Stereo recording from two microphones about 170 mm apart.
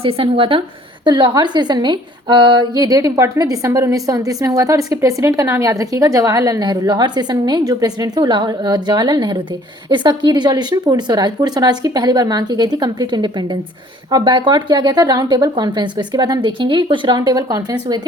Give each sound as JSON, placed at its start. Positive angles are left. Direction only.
{"t": 0.0, "sound": "a woman's voice", "side_deg": -35}